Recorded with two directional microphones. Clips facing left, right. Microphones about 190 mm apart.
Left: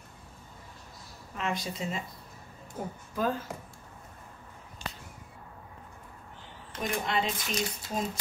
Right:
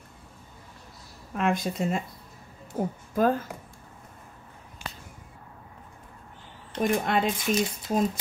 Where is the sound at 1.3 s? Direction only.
50° right (ahead or behind).